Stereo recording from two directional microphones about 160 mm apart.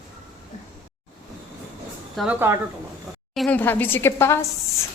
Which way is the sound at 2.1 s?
Centre (ahead or behind).